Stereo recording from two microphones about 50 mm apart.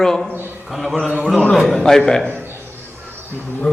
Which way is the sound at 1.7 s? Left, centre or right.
Centre.